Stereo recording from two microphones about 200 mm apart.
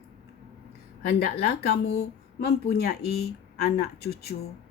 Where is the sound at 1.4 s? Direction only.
55° left (ahead or behind).